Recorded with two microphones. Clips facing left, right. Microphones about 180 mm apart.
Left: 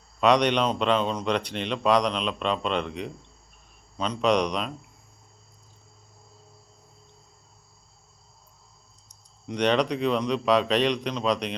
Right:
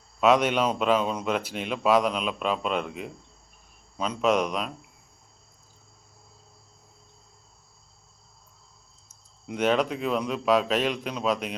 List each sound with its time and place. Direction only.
0.2 s speech: 5° right (ahead or behind)
9.0 s speech: 5° right (ahead or behind)